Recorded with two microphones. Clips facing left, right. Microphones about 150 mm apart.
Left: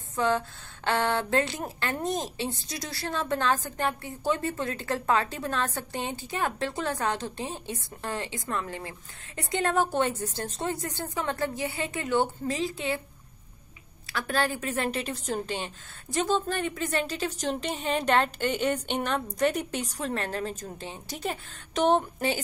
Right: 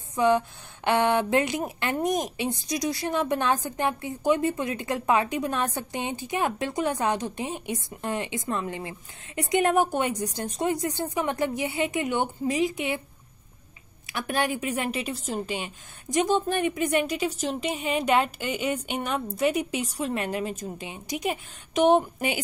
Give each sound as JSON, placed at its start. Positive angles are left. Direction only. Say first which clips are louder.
{"t": 0.1, "sound": "a woman's voice", "louder": "right 4 dB", "side_deg": -15}
{"t": 14.0, "sound": "a woman's voice", "louder": "right 1 dB", "side_deg": -20}